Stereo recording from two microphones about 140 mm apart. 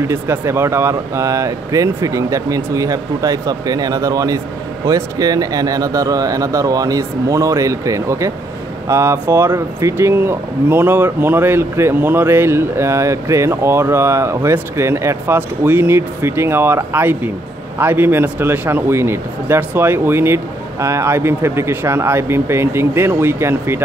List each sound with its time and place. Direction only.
0.1 s speech: 15° right (ahead or behind)